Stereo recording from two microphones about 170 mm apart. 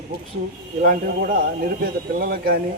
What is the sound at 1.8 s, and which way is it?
Speech, 65° right (ahead or behind).